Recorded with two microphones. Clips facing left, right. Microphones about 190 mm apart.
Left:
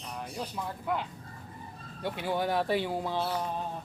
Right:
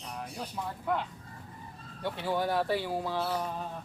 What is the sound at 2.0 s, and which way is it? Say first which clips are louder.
Speech: even; 15° left (ahead or behind).